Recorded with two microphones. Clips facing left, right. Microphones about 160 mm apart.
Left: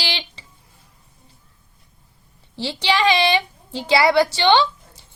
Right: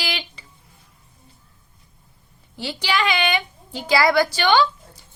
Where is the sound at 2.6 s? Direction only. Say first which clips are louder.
Left 3 dB; 25° left (ahead or behind).